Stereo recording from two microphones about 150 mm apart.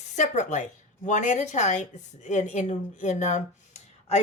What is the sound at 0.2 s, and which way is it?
A woman's voice, 55° left (ahead or behind).